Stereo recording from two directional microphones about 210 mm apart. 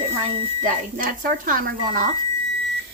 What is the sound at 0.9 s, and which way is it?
Speech, 40° right (ahead or behind).